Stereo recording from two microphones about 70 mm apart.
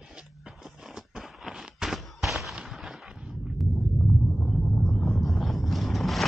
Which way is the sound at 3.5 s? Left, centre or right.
Centre.